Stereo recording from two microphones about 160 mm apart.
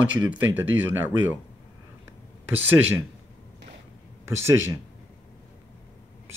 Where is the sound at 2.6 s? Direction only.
10° right (ahead or behind).